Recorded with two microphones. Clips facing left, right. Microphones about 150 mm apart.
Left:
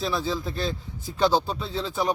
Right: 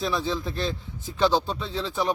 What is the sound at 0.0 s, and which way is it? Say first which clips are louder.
A man's voice: even; centre (ahead or behind).